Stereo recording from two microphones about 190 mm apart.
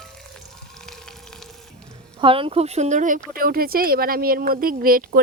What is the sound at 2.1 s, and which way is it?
Speech, 30° right (ahead or behind).